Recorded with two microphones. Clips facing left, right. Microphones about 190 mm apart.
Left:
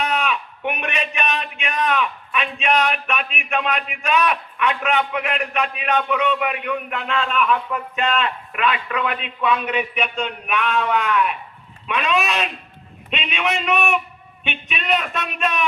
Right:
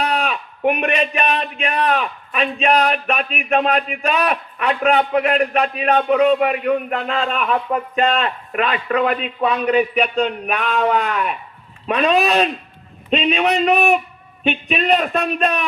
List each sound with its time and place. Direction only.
0.0 s a man's voice: 35° right (ahead or behind)